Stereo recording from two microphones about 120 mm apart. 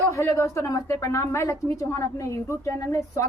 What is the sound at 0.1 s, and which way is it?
A woman's voice, 25° left (ahead or behind).